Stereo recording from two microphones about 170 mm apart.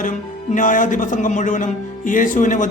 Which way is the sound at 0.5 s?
50° left (ahead or behind).